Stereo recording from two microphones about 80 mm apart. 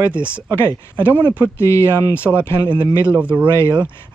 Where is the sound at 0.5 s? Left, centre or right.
Left.